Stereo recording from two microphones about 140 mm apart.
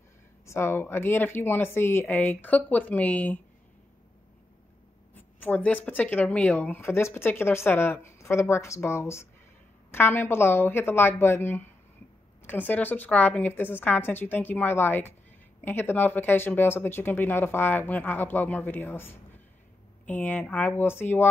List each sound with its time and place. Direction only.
0.5 s speech: 20° left (ahead or behind)
5.1 s speech: 10° left (ahead or behind)